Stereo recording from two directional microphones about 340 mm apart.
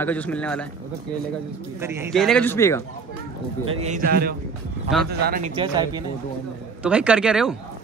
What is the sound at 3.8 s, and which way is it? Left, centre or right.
A man's voice, right.